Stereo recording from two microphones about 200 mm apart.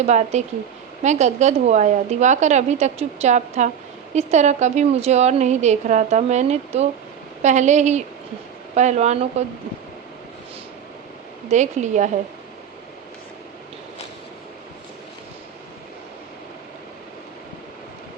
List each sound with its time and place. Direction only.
0.0 s a woman's voice: 35° right (ahead or behind)
11.4 s a woman's voice: 35° right (ahead or behind)